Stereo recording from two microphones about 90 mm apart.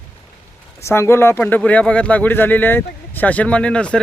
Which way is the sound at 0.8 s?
30° left (ahead or behind).